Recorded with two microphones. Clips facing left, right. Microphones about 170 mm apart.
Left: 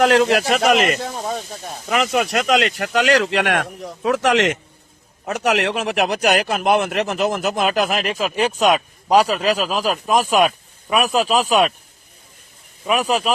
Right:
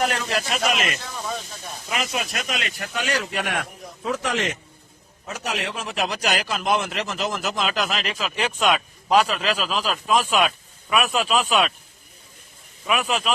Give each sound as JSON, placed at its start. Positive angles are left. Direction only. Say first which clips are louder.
{"t": 0.0, "sound": "a man's voice", "louder": "left 10 dB", "side_deg": 75}
{"t": 1.9, "sound": "speech", "louder": "left 9 dB", "side_deg": 65}
{"t": 5.2, "sound": "a man's voice", "louder": "left 10 dB", "side_deg": 70}
{"t": 12.8, "sound": "speech", "louder": "left 5 dB", "side_deg": 35}